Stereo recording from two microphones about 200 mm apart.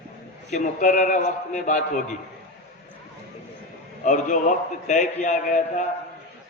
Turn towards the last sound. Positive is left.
turn(degrees=40)  # may be behind; listen again after turning